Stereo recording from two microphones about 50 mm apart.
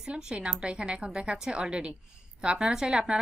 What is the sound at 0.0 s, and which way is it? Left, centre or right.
A woman's voice, centre.